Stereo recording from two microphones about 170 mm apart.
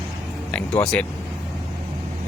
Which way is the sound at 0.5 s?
5° left (ahead or behind).